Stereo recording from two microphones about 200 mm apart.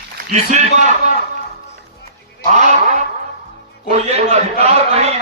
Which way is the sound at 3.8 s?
35° right (ahead or behind).